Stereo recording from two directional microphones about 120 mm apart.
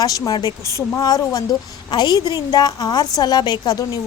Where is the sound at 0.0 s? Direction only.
30° left (ahead or behind).